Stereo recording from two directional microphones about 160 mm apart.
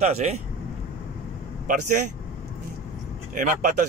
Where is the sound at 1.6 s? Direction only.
50° right (ahead or behind).